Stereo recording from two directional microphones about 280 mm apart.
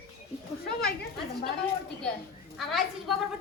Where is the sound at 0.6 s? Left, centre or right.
Left.